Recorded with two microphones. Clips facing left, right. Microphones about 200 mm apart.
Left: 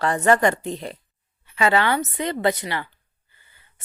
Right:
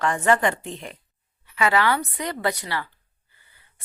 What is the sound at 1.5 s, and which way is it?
A woman's voice, 25° left (ahead or behind).